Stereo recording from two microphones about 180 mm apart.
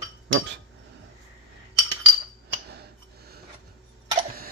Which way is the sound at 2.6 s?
60° right (ahead or behind).